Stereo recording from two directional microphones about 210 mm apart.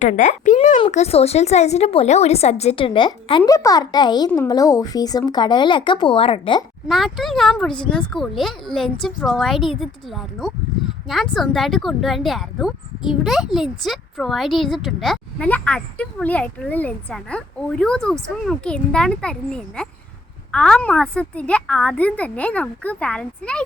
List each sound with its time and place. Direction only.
0.0 s a child's voice: 35° left (ahead or behind)
6.8 s speech: centre (ahead or behind)